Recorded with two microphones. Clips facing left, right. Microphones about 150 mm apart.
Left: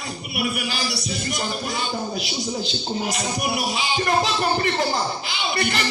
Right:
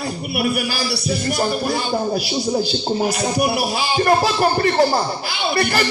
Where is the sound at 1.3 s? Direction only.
55° right (ahead or behind).